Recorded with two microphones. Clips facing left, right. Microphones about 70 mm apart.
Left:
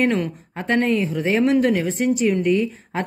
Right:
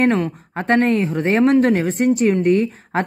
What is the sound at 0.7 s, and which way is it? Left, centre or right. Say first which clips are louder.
Speech: right 2 dB; right.